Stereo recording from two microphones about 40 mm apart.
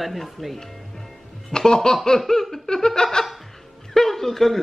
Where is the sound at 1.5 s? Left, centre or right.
Centre.